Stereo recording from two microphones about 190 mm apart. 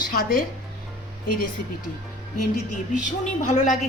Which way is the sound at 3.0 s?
40° left (ahead or behind).